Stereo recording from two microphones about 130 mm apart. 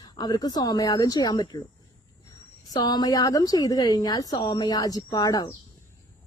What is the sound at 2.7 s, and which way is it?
A woman's voice, 30° left (ahead or behind).